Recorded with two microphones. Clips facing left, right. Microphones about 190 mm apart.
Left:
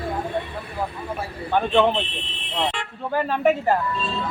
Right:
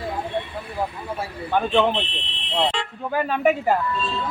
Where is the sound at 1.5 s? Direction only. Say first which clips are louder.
Left 1 dB; centre (ahead or behind).